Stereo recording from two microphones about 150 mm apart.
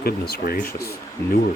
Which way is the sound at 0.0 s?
90° left.